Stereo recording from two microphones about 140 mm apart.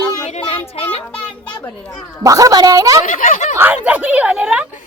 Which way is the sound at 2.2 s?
25° right (ahead or behind).